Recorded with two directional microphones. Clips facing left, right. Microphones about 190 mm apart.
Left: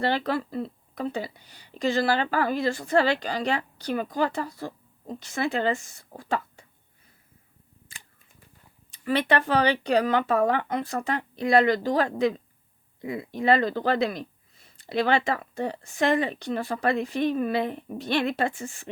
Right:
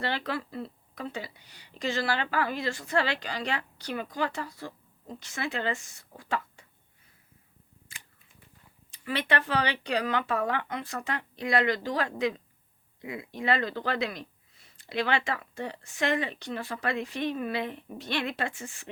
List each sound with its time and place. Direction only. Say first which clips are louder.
0.0 s a woman's voice: left 6 dB; 40° left (ahead or behind)
9.0 s a woman's voice: left 6 dB; 40° left (ahead or behind)